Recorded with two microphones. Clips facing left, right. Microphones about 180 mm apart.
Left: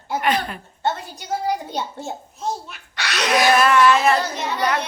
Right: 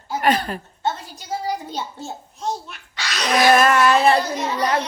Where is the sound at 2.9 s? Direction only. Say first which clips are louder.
Left 2 dB; 65° left (ahead or behind).